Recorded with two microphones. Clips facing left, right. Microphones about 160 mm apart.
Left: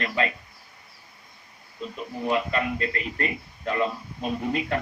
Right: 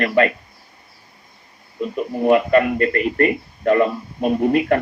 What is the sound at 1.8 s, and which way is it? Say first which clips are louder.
Speech: right 11 dB; 60° right (ahead or behind).